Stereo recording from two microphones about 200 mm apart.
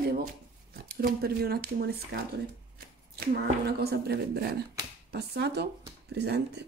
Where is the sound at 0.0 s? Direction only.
50° right (ahead or behind).